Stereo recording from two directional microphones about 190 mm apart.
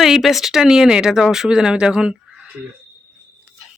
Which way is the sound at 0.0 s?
Centre (ahead or behind).